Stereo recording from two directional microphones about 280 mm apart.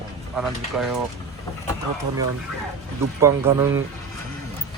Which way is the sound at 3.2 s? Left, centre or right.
Centre.